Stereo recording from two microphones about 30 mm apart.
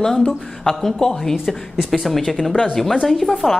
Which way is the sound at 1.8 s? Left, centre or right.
Centre.